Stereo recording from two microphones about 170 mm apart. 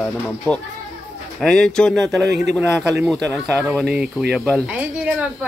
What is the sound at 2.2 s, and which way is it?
Speech, 80° right.